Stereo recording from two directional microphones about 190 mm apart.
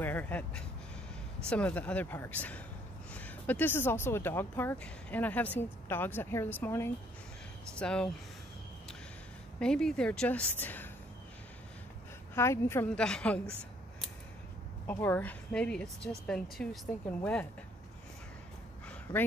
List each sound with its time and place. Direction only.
0.0 s a woman's voice: 10° left (ahead or behind)
9.6 s a woman's voice: 5° left (ahead or behind)
12.4 s speech: 15° left (ahead or behind)
14.9 s a woman's voice: 10° left (ahead or behind)
19.1 s speech: 30° left (ahead or behind)